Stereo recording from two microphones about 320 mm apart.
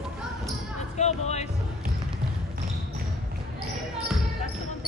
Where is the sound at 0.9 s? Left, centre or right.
Left.